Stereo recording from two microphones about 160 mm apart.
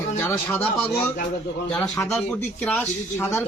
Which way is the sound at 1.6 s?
5° left (ahead or behind).